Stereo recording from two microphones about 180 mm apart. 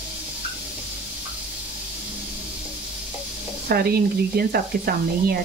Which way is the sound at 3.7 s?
60° right (ahead or behind).